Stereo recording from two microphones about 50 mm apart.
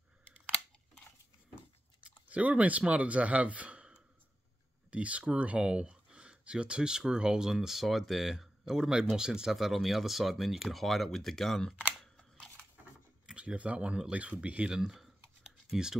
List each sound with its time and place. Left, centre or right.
2.0 s typing: right
2.9 s speech: right; by 11.6 s centre
13.4 s speech: right
14.8 s speech: centre